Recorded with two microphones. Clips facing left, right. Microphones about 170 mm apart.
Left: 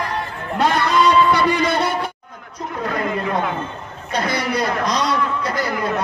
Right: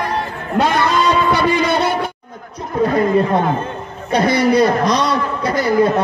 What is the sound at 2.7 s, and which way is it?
A man's voice, 35° right (ahead or behind).